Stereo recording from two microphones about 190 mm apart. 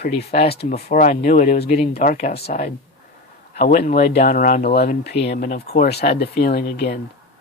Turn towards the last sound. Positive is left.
turn(degrees=55)  # may be behind; listen again after turning